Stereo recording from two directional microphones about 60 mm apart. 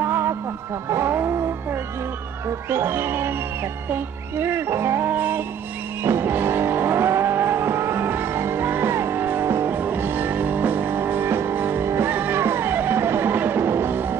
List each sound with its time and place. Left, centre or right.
0.0 s music: right
0.8 s vehicle: right
1.1 s music: right
2.7 s speech: right
3.9 s music: right
9.8 s music: right